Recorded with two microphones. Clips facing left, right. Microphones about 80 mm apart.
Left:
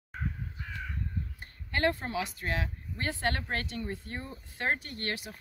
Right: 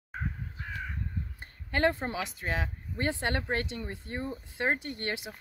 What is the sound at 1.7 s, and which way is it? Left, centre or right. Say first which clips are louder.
Speech: right 2 dB; right.